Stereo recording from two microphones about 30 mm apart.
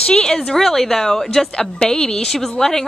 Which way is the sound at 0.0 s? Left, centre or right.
Left.